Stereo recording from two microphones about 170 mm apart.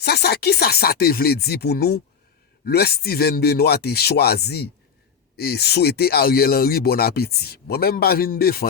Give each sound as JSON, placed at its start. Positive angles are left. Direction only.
{"t": 0.0, "sound": "speech", "side_deg": 70}